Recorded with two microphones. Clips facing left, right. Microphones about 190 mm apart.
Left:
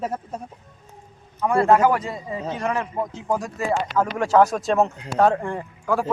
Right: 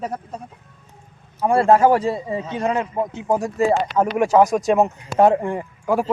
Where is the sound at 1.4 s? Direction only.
30° right (ahead or behind).